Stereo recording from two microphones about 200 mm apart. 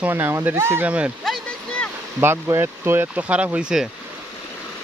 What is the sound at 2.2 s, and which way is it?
Speech, 10° right (ahead or behind).